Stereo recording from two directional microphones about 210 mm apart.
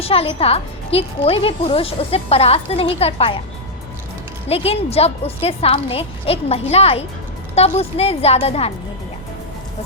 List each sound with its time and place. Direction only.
0.0 s speech: 25° left (ahead or behind)
4.4 s speech: 30° left (ahead or behind)